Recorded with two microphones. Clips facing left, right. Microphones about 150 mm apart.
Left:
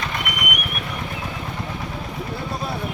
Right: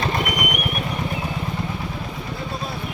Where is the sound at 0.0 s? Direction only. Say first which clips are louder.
Right 5 dB; 35° right (ahead or behind).